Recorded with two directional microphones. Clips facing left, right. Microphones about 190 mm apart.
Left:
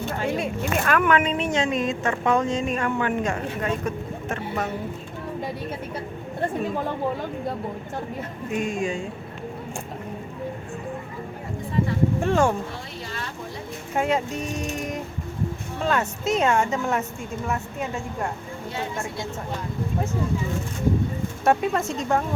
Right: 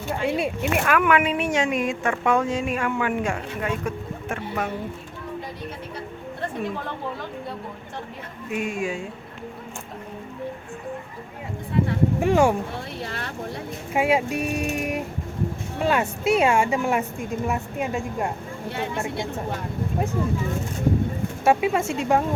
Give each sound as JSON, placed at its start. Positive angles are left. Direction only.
{"t": 0.0, "sound": "speech", "side_deg": -15}
{"t": 8.5, "sound": "speech", "side_deg": -5}
{"t": 12.2, "sound": "speech", "side_deg": -15}
{"t": 13.1, "sound": "a sound", "side_deg": -60}
{"t": 13.9, "sound": "speech", "side_deg": -10}
{"t": 21.4, "sound": "speech", "side_deg": -5}